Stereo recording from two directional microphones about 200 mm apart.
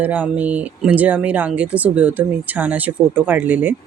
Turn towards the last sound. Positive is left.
turn(degrees=-10)  # may be behind; listen again after turning